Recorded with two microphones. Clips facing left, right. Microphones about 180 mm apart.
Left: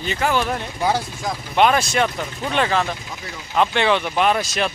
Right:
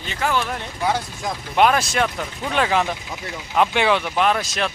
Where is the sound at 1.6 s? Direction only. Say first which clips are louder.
Left 1 dB; centre (ahead or behind).